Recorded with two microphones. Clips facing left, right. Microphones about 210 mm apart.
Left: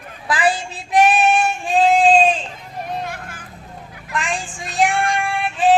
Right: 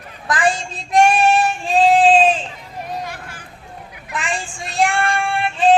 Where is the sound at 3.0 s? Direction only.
50° left (ahead or behind).